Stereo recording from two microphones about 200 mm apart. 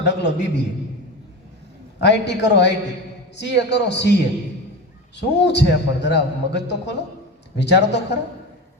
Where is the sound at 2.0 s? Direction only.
60° left (ahead or behind).